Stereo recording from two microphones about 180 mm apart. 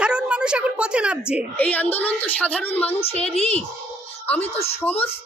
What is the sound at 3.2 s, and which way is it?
Speech, 35° left (ahead or behind).